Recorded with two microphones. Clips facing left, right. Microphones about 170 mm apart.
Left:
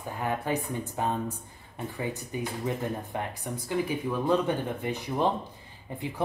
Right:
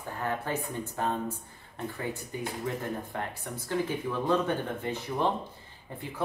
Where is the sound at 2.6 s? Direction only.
15° left (ahead or behind).